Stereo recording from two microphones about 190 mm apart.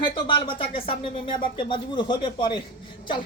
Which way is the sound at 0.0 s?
25° left (ahead or behind).